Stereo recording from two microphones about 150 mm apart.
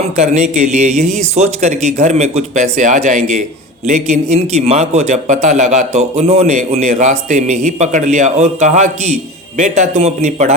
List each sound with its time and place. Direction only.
0.2 s a man's voice: 50° right (ahead or behind)